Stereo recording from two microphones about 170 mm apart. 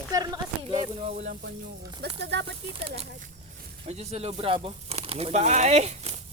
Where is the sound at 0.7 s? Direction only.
40° right (ahead or behind).